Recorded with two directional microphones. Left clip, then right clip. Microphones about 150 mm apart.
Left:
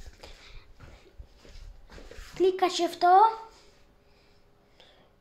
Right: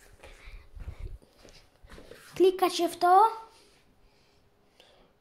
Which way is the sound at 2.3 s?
25° right (ahead or behind).